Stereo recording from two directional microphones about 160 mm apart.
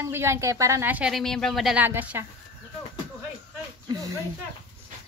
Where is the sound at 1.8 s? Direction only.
10° right (ahead or behind).